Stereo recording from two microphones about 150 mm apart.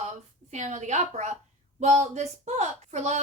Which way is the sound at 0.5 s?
50° right (ahead or behind).